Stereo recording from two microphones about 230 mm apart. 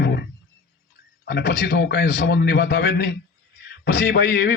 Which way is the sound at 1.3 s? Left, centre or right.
Left.